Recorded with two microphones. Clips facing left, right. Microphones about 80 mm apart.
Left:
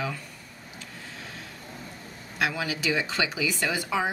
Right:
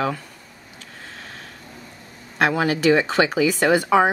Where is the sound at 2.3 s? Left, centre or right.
Right.